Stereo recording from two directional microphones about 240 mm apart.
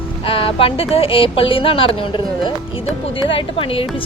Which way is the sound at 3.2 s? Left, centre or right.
Left.